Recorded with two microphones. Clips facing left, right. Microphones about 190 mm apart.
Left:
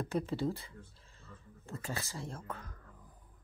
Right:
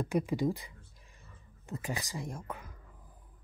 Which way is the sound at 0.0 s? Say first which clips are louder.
Right 4 dB; 15° right (ahead or behind).